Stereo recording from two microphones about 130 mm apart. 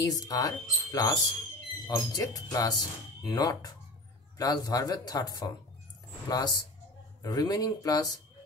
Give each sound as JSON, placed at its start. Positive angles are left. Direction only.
{"t": 0.0, "sound": "speech", "side_deg": 30}